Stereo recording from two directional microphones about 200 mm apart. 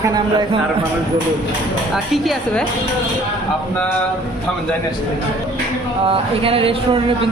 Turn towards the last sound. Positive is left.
turn(degrees=-25)  # may be behind; listen again after turning